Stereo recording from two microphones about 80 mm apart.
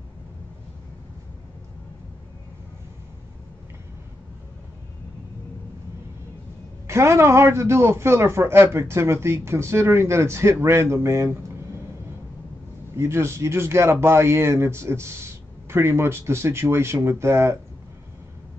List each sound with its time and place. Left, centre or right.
6.9 s speech: right
12.9 s speech: right